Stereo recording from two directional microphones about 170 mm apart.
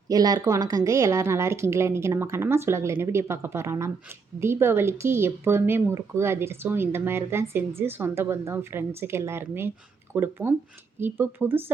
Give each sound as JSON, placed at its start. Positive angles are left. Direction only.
{"t": 0.1, "sound": "speech", "side_deg": -20}